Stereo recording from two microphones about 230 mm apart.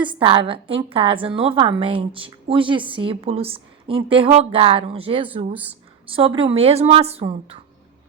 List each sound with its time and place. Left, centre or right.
0.1 s a woman's voice: right